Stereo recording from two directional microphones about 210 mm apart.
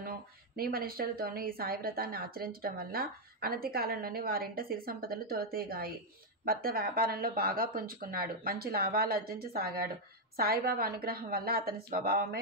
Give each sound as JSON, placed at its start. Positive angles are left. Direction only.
{"t": 0.0, "sound": "a woman's voice", "side_deg": -45}